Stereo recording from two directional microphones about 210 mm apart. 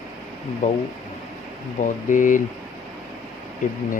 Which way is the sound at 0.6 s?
35° left (ahead or behind).